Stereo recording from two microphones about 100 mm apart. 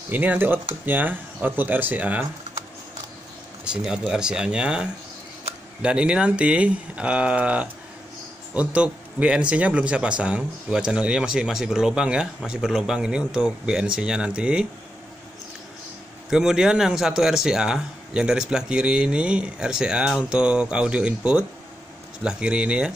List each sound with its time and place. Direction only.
0.1 s speech: 20° right (ahead or behind)
3.6 s a man's voice: 5° right (ahead or behind)
16.3 s a man's voice: 5° right (ahead or behind)